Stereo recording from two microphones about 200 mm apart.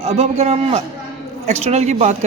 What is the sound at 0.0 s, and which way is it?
A man's voice, 30° right (ahead or behind).